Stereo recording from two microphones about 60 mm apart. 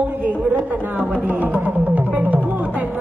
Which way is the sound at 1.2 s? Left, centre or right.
Right.